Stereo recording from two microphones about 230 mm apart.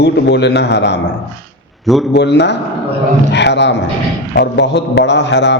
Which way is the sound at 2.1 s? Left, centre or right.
Left.